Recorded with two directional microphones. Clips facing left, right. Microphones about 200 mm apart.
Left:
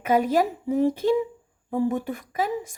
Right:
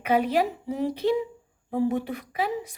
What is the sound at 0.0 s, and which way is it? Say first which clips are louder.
Speech: left 2 dB; 45° left (ahead or behind).